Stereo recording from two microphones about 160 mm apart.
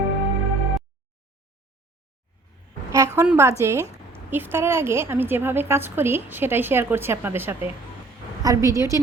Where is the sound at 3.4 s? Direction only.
15° right (ahead or behind).